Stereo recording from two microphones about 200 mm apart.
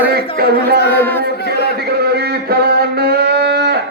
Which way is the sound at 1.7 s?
55° right (ahead or behind).